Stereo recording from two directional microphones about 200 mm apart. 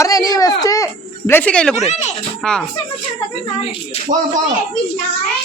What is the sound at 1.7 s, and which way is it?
Speech, 35° left (ahead or behind).